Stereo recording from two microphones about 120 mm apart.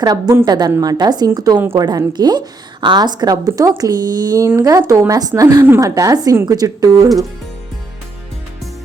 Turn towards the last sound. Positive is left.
turn(degrees=-30)  # may be behind; listen again after turning